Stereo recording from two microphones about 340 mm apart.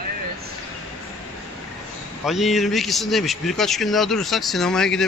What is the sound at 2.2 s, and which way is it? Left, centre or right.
Speech, centre.